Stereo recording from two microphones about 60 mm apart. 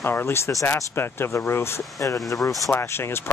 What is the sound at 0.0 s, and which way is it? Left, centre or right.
Speech, left.